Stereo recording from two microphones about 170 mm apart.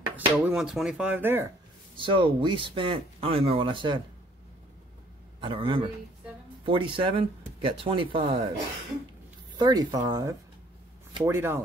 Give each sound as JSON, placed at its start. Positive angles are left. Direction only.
{"t": 0.1, "sound": "dishes", "side_deg": -5}
{"t": 2.0, "sound": "speech", "side_deg": -30}
{"t": 5.4, "sound": "speech", "side_deg": -30}
{"t": 9.6, "sound": "speech", "side_deg": -25}
{"t": 11.2, "sound": "dishes", "side_deg": -15}